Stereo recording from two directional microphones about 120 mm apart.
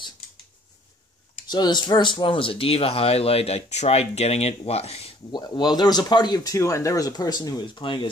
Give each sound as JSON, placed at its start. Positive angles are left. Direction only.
{"t": 1.5, "sound": "speech", "side_deg": 35}
{"t": 5.3, "sound": "speech", "side_deg": 35}